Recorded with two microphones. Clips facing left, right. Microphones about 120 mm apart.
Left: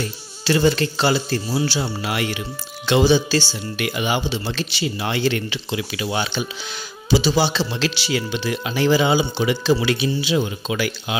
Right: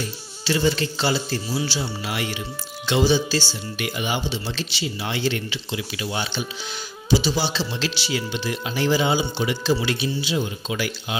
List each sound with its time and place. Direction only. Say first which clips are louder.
0.4 s speech: left 4 dB; 55° left (ahead or behind); by 6.4 s 85° left
7.1 s a man's voice: left 4 dB; 70° left (ahead or behind); by 11.1 s 90° left